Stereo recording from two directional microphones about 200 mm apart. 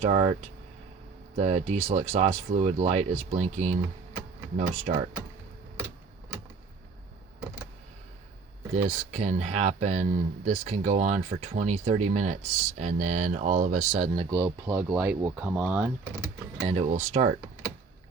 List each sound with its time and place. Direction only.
0.0 s speech: 30° right (ahead or behind)
1.4 s speech: 35° right (ahead or behind)
8.7 s speech: 35° right (ahead or behind)
14.3 s speech: 15° right (ahead or behind)
16.6 s speech: 35° right (ahead or behind)